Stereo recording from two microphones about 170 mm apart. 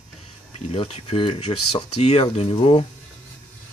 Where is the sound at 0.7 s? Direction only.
35° left (ahead or behind).